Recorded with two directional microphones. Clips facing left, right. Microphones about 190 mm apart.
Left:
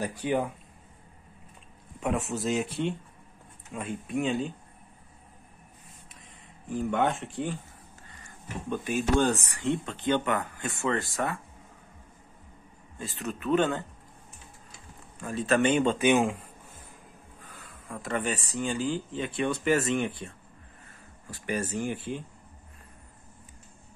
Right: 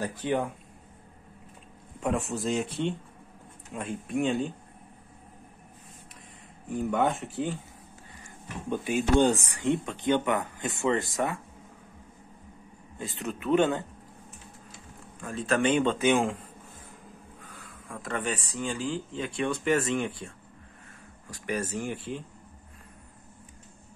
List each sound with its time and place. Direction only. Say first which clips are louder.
0.0 s speech: even; 15° left (ahead or behind)
2.0 s speech: even; centre (ahead or behind)
6.7 s speech: even; centre (ahead or behind)
8.6 s speech: right 1 dB; 15° right (ahead or behind)
13.0 s speech: even; 15° right (ahead or behind)
15.1 s speech: left 2 dB; 5° left (ahead or behind)
17.8 s speech: left 1 dB; 5° left (ahead or behind)
21.3 s speech: even; 5° left (ahead or behind)